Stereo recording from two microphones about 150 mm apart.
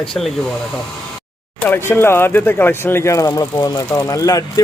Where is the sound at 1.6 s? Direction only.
15° left (ahead or behind).